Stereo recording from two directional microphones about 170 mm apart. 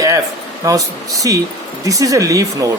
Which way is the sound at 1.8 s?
20° right (ahead or behind).